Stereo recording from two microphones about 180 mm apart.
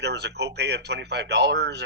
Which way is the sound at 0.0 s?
70° right (ahead or behind).